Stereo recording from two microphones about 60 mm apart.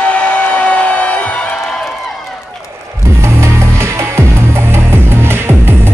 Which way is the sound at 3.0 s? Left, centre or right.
Right.